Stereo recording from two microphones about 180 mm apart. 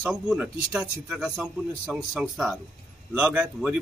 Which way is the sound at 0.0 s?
5° right (ahead or behind).